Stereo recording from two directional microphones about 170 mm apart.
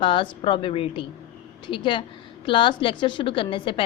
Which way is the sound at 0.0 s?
30° left (ahead or behind).